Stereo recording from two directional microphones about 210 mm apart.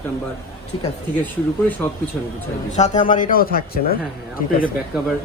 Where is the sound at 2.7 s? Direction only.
35° left (ahead or behind).